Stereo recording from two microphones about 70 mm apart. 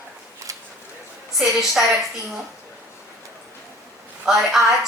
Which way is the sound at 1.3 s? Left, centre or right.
Centre.